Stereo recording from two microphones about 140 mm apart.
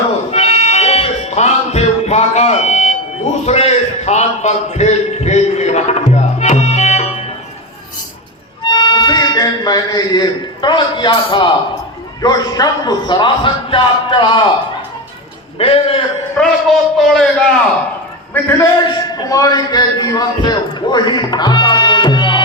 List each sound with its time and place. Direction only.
0.3 s music: 50° left (ahead or behind)
3.4 s a man's voice: 50° left (ahead or behind)
8.6 s a man's voice: 35° left (ahead or behind)
15.5 s a man's voice: 40° left (ahead or behind)
16.4 s a man's voice: centre (ahead or behind)
18.9 s a man's voice: 25° left (ahead or behind)